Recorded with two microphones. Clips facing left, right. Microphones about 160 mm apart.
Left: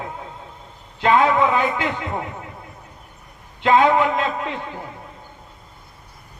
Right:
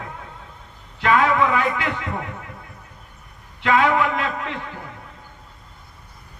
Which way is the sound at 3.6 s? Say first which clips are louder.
Left 3 dB; 25° left (ahead or behind).